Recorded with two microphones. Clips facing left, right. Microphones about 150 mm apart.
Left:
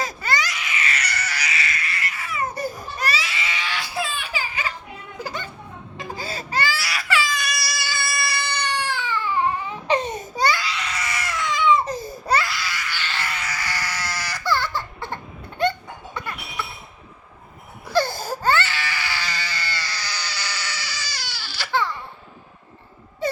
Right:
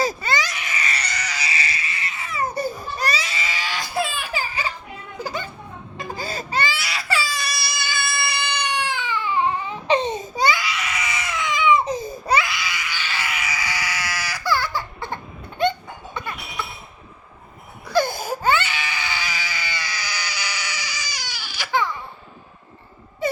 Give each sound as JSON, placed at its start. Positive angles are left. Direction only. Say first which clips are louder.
{"t": 0.0, "sound": "baby cry", "louder": "right 3 dB", "side_deg": -25}
{"t": 0.5, "sound": "a sound", "louder": "even", "side_deg": -45}
{"t": 1.1, "sound": "a sound", "louder": "even", "side_deg": -15}
{"t": 1.5, "sound": "a sound", "louder": "even", "side_deg": -30}
{"t": 3.1, "sound": "baby cry", "louder": "even", "side_deg": -40}
{"t": 4.0, "sound": "baby laughter", "louder": "right 2 dB", "side_deg": -45}
{"t": 6.1, "sound": "baby cry", "louder": "right 2 dB", "side_deg": -50}
{"t": 6.5, "sound": "baby cry", "louder": "left 1 dB", "side_deg": -20}
{"t": 7.1, "sound": "cat", "louder": "left 2 dB", "side_deg": -35}
{"t": 11.0, "sound": "baby cry", "louder": "left 1 dB", "side_deg": -20}
{"t": 16.1, "sound": "music", "louder": "right 1 dB", "side_deg": -20}
{"t": 17.9, "sound": "baby cry", "louder": "right 1 dB", "side_deg": -15}